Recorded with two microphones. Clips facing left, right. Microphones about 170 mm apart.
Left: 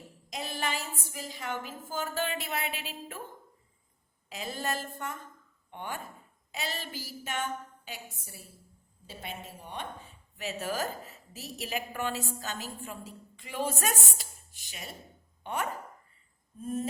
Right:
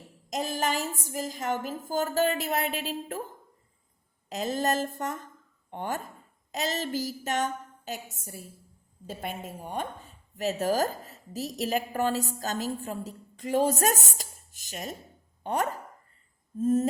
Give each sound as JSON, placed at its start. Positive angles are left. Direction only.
{"t": 0.3, "sound": "a woman's voice", "side_deg": -45}
{"t": 4.3, "sound": "a woman's voice", "side_deg": -40}